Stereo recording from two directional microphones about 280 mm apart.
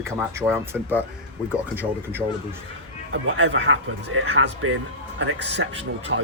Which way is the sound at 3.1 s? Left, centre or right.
Right.